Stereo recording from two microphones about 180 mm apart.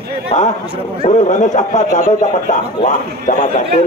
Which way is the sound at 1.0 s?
40° left (ahead or behind).